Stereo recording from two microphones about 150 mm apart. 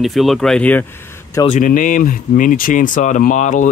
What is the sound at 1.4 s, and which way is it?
Speech, 60° left (ahead or behind).